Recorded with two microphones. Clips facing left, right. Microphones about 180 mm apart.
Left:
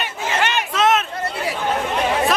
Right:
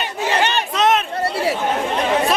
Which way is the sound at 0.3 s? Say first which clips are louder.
Right 2 dB; 35° right (ahead or behind).